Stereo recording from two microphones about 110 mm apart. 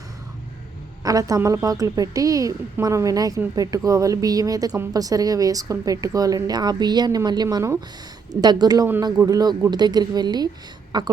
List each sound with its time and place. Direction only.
1.0 s speech: 30° right (ahead or behind)
7.4 s speech: 25° right (ahead or behind)
8.3 s speech: 40° right (ahead or behind)